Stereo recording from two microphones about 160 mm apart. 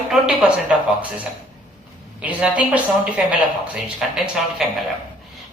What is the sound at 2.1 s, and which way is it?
A woman's voice, 10° right (ahead or behind).